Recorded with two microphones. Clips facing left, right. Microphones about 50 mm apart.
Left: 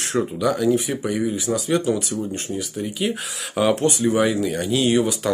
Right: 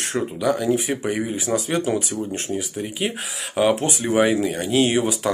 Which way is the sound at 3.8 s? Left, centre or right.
Right.